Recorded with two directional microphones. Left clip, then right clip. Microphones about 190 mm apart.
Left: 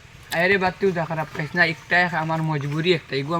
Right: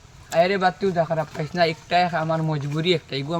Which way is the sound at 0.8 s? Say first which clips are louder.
Right 1 dB; 5° right (ahead or behind).